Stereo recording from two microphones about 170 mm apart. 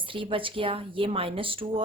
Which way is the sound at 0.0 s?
30° right (ahead or behind).